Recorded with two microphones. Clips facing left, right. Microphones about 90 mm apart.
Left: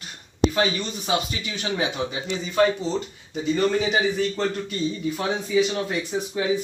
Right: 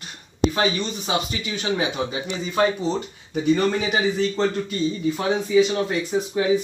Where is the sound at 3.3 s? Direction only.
60° right (ahead or behind).